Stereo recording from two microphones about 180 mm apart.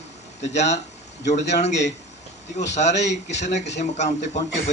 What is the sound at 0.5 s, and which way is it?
A man's voice, 40° left (ahead or behind).